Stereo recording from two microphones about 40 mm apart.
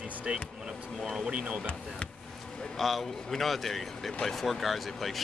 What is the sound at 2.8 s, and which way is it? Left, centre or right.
A man's voice, centre.